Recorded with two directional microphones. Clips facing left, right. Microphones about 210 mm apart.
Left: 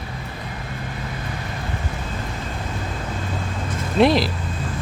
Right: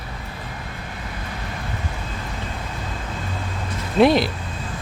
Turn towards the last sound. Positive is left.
turn(degrees=0)  # may be behind; listen again after turning